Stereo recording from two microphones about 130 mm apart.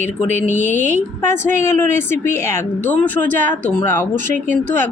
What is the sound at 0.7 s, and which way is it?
A woman's voice, 15° left (ahead or behind).